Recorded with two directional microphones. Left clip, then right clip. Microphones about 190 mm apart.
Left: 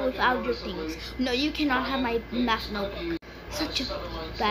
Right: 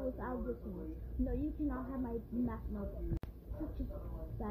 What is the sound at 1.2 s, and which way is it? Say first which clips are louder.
Speech: left 13 dB; 30° left (ahead or behind).